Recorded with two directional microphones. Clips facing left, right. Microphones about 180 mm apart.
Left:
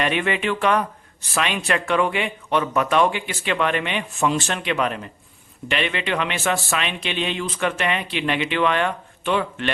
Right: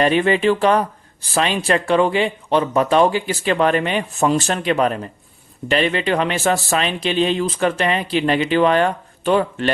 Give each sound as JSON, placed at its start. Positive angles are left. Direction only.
{"t": 0.0, "sound": "speech", "side_deg": -35}